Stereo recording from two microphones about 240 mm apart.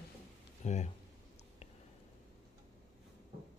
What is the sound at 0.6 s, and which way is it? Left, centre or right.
Speech, left.